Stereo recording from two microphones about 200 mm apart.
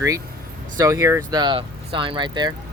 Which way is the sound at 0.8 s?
15° right (ahead or behind).